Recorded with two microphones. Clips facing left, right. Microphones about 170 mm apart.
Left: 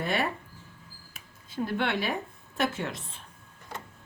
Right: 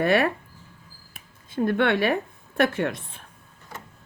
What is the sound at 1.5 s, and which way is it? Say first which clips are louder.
A woman's voice: right 7 dB; 55° right (ahead or behind).